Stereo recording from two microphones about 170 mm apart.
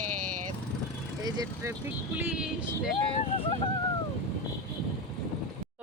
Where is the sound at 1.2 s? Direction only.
25° right (ahead or behind).